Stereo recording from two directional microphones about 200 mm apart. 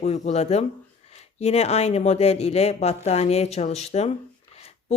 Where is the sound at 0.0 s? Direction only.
35° left (ahead or behind).